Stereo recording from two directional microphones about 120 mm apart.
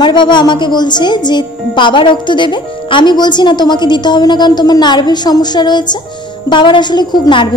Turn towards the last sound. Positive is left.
turn(degrees=40)  # may be behind; listen again after turning